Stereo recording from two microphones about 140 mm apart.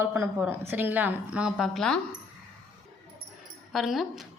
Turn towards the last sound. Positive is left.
turn(degrees=0)  # may be behind; listen again after turning